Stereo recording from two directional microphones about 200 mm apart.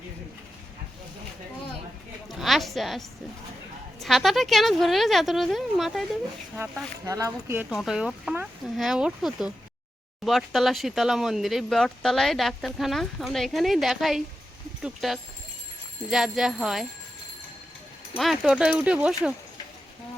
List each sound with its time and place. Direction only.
2.4 s a sound: centre (ahead or behind)
4.0 s speech: centre (ahead or behind)
7.0 s speech: 15° right (ahead or behind)
7.7 s speech: centre (ahead or behind)
18.2 s speech: centre (ahead or behind)